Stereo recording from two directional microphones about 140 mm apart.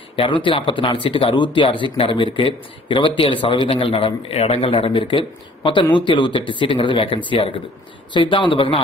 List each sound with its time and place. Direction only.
0.1 s speech: 40° left (ahead or behind)